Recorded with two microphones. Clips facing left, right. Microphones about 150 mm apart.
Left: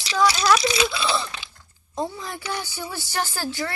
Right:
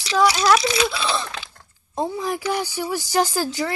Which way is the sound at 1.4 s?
90° right.